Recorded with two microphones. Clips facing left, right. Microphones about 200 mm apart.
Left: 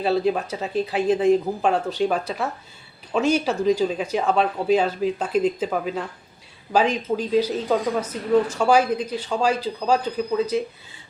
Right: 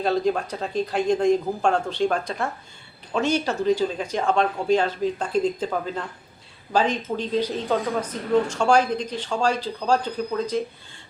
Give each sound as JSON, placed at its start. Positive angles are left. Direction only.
{"t": 0.0, "sound": "speech", "side_deg": 5}